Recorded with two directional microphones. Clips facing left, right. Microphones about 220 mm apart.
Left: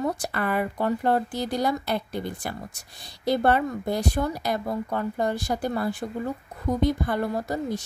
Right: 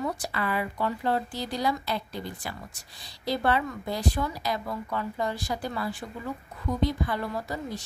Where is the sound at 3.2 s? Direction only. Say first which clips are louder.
Left 5 dB; 50° left (ahead or behind).